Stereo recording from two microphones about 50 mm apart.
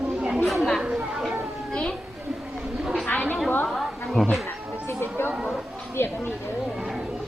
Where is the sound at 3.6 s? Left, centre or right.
Centre.